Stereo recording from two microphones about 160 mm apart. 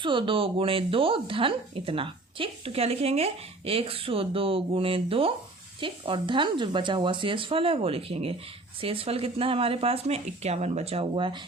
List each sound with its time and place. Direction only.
0.0 s speech: 30° right (ahead or behind)